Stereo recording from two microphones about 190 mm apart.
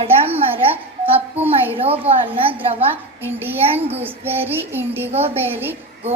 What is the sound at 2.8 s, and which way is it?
A woman's voice, 10° right (ahead or behind).